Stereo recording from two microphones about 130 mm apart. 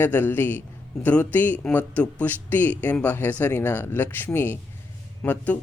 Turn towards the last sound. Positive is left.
turn(degrees=5)  # may be behind; listen again after turning